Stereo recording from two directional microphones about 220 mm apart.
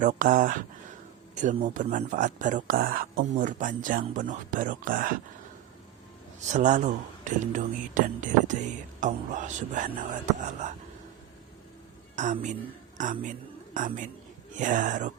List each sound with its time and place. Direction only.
0.0 s speech: 35° right (ahead or behind)
6.5 s speech: 35° right (ahead or behind)
12.1 s a woman's voice: 35° right (ahead or behind)